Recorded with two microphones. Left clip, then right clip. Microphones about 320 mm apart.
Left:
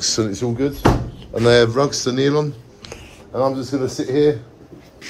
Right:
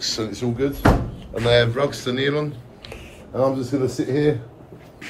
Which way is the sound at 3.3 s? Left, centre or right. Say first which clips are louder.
Left 1 dB; centre.